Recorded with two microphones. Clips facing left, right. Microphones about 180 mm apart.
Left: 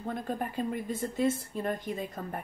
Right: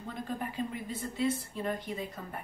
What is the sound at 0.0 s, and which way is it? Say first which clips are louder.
Speech: left 4 dB; 50° left (ahead or behind).